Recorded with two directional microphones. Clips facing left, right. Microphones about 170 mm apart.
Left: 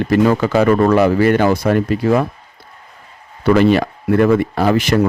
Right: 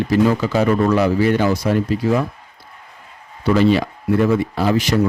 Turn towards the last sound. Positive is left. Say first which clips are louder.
# left 3 dB
turn(degrees=55)  # may be behind; listen again after turning